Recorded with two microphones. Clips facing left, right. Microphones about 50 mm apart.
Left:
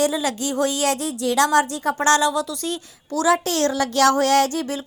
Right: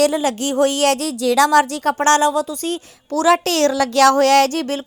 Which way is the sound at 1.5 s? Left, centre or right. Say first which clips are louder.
Right 4 dB; right.